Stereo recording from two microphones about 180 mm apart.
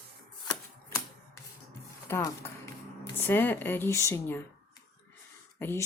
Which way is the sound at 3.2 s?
10° left (ahead or behind).